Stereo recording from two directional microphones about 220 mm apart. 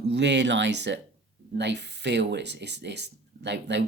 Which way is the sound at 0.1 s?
55° right (ahead or behind).